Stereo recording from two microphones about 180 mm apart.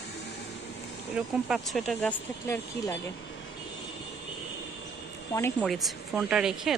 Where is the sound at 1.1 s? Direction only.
Centre (ahead or behind).